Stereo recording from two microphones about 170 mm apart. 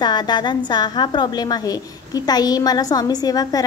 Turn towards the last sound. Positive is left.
turn(degrees=20)  # may be behind; listen again after turning